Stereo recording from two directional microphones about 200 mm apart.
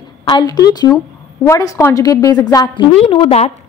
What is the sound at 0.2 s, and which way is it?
A woman's voice, 20° left (ahead or behind).